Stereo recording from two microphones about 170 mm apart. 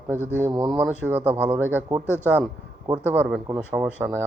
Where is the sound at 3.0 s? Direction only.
10° right (ahead or behind).